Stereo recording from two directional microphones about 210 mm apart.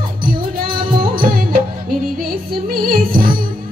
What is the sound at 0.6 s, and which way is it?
Music, 45° right (ahead or behind).